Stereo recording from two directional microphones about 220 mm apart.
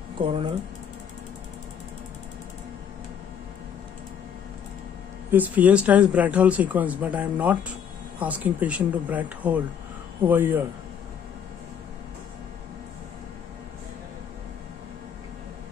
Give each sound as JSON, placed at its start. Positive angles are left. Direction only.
{"t": 0.2, "sound": "speech", "side_deg": -25}
{"t": 5.3, "sound": "speech", "side_deg": -5}